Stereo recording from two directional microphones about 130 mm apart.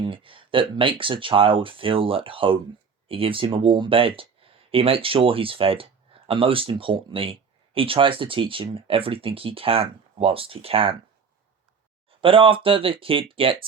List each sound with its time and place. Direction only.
0.0 s speech: 40° right (ahead or behind)
12.2 s speech: 40° right (ahead or behind)